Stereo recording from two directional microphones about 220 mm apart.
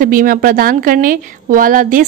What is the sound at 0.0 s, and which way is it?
A woman's voice, 40° right (ahead or behind).